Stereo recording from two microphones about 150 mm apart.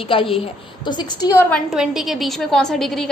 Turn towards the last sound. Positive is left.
turn(degrees=5)  # may be behind; listen again after turning